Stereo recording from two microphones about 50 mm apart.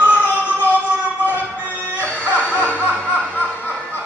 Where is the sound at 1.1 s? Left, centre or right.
Left.